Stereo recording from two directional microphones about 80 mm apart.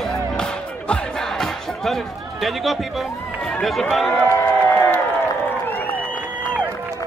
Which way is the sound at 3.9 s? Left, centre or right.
Centre.